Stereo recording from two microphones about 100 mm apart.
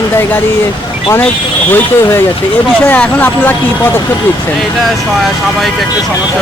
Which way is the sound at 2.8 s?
15° left (ahead or behind).